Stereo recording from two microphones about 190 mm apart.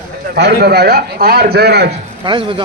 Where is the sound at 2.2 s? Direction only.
25° right (ahead or behind).